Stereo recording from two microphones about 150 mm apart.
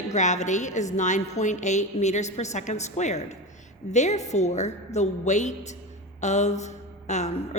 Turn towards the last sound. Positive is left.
turn(degrees=50)  # may be behind; listen again after turning